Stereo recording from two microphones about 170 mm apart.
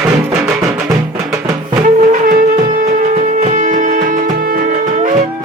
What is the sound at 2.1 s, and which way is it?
Music, 50° right (ahead or behind).